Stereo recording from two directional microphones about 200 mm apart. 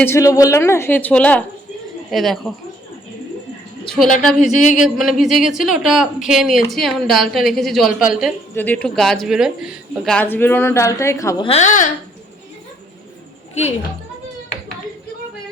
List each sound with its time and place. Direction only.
0.0 s speech: 15° left (ahead or behind)
3.8 s speech: centre (ahead or behind)
4.4 s speech: 40° left (ahead or behind)
4.8 s speech: centre (ahead or behind)
8.5 s speech: 10° left (ahead or behind)
11.4 s speech: 35° left (ahead or behind)
13.5 s a woman's voice: 35° left (ahead or behind)